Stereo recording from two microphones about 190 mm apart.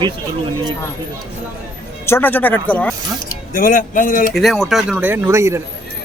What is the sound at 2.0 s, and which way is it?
Speech, 10° left (ahead or behind).